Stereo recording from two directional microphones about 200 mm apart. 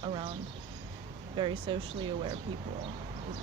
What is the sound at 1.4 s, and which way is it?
Speech, 25° right (ahead or behind).